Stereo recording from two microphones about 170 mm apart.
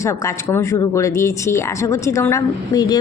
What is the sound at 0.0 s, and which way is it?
Speech, 15° left (ahead or behind).